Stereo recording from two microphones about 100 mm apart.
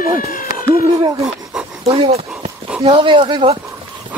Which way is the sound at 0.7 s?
35° right (ahead or behind).